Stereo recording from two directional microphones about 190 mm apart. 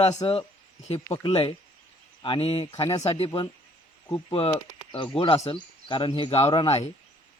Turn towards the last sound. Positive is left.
turn(degrees=30)  # may be behind; listen again after turning